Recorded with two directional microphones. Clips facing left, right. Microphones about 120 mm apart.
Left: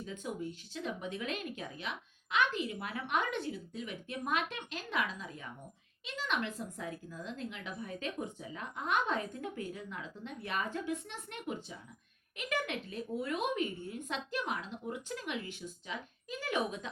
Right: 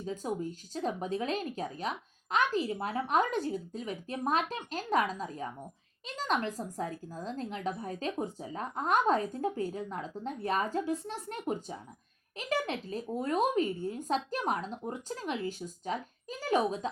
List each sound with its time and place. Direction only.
0.0 s a woman's voice: 35° right (ahead or behind)